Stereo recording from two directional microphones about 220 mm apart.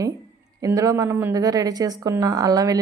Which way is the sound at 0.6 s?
15° right (ahead or behind).